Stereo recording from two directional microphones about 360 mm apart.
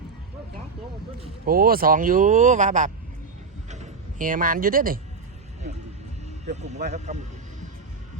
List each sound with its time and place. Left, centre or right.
1.2 s speech: right
3.7 s a sound: right
6.5 s speech: centre